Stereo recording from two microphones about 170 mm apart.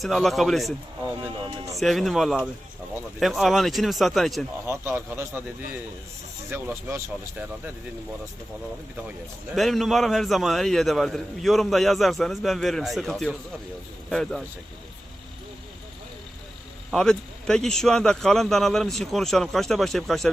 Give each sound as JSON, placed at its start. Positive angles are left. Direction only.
{"t": 0.0, "sound": "a man's voice", "side_deg": 0}
{"t": 1.2, "sound": "speech", "side_deg": -20}
{"t": 1.8, "sound": "a man's voice", "side_deg": 0}
{"t": 4.6, "sound": "speech", "side_deg": -15}
{"t": 6.5, "sound": "speech", "side_deg": -15}
{"t": 9.6, "sound": "a man's voice", "side_deg": 0}
{"t": 16.9, "sound": "a man's voice", "side_deg": 5}